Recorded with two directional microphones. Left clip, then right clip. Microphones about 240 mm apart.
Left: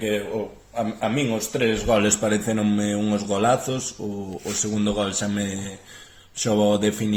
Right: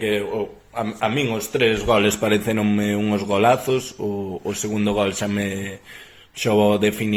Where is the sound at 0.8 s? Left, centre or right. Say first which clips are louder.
Right 2 dB; right.